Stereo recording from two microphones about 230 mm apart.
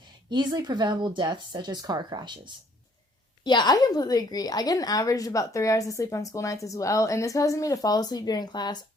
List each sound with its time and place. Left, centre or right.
0.3 s speech: centre
3.4 s a woman's voice: centre